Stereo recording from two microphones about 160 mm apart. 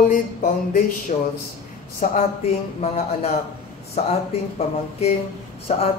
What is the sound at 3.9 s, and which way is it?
Speech, 40° left (ahead or behind).